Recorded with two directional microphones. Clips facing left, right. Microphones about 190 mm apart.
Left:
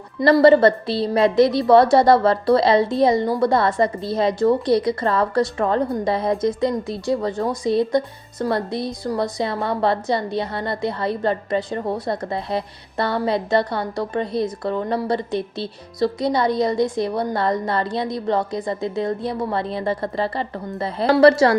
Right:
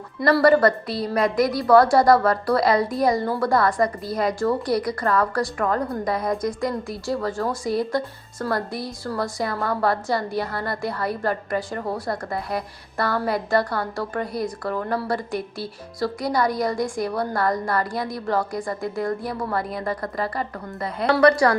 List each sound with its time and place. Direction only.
0.2 s a woman's voice: 20° left (ahead or behind)